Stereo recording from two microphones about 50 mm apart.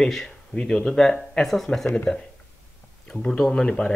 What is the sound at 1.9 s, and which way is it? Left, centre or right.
Speech, centre.